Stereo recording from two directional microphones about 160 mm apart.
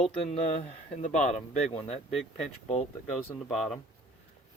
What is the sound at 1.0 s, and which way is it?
Speech, 50° left (ahead or behind).